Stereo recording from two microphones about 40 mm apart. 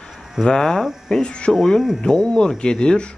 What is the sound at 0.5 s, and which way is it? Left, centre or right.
Speech, centre.